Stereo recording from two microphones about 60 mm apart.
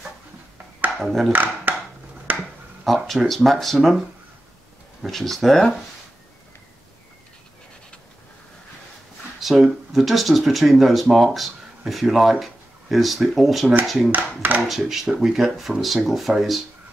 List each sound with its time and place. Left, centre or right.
0.9 s speech: centre
1.3 s speech: right
2.3 s finger snapping: right
3.1 s speech: centre
5.0 s speech: centre
9.4 s speech: centre
14.1 s speech: right
14.7 s speech: centre